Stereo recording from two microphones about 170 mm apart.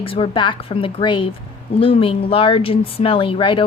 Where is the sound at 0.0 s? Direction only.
30° left (ahead or behind).